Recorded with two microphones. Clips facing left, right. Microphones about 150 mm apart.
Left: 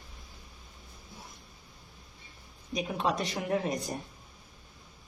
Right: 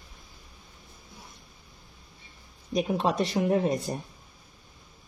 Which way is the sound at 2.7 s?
40° right (ahead or behind).